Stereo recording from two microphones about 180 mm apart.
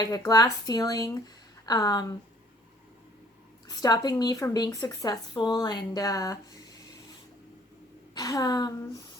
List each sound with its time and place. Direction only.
0.0 s speech: 20° left (ahead or behind)
3.7 s speech: 20° left (ahead or behind)
8.1 s speech: 20° left (ahead or behind)